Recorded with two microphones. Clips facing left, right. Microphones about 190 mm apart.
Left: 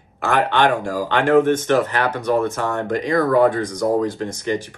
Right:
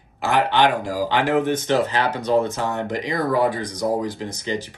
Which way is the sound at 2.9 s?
55° left (ahead or behind).